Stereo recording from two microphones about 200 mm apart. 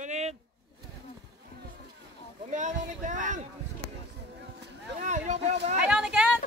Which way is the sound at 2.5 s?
40° right (ahead or behind).